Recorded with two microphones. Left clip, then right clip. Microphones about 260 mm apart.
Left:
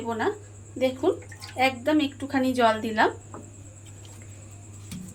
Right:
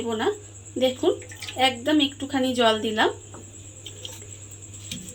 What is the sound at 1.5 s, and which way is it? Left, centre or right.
Speech, right.